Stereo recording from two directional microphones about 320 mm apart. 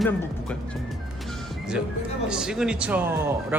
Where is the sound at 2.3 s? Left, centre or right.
Centre.